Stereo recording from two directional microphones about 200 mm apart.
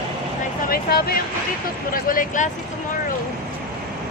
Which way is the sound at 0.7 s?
50° left (ahead or behind).